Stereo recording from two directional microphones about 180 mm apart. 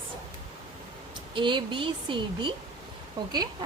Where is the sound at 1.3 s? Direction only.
25° right (ahead or behind).